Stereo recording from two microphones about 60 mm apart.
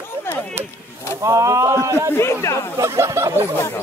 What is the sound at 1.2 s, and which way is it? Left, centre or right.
Speech, right.